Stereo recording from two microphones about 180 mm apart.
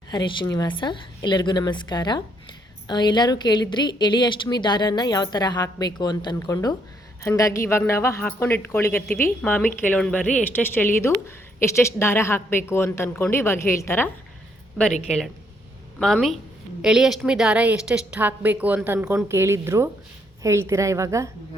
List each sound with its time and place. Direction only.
0.1 s a woman's voice: 25° left (ahead or behind)
16.0 s a woman's voice: 5° left (ahead or behind)
19.1 s a woman's voice: 15° right (ahead or behind)